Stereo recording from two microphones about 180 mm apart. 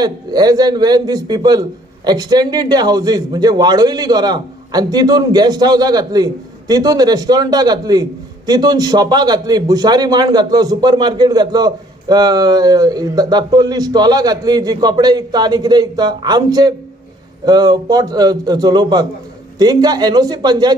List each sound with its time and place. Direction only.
0.0 s a man's voice: 20° right (ahead or behind)